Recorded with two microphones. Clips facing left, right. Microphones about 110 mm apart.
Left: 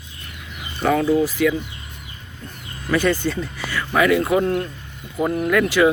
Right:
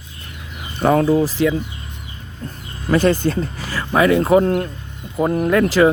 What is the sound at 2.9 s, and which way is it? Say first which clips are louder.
Speech: right 4 dB; 40° right (ahead or behind).